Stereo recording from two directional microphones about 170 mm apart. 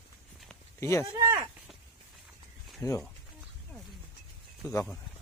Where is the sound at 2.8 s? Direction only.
20° left (ahead or behind).